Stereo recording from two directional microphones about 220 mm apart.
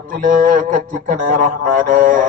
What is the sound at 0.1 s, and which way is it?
A man's voice, 35° right (ahead or behind).